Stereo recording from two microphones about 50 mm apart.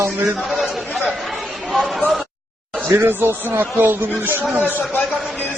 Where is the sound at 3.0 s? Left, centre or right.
Right.